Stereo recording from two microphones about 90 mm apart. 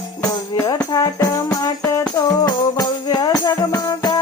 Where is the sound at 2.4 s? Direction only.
45° left (ahead or behind).